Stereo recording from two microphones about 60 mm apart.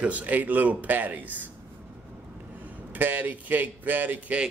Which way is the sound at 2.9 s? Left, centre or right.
Right.